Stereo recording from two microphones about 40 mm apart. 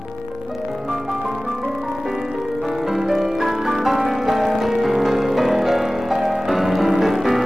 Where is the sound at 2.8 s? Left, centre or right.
Centre.